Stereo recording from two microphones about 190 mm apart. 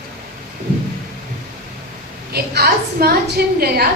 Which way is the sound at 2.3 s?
55° right (ahead or behind).